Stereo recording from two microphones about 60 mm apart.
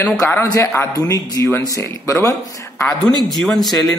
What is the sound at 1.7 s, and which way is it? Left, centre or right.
Speech, left.